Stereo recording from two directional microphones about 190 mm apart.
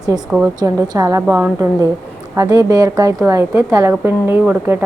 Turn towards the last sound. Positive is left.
turn(degrees=-10)  # may be behind; listen again after turning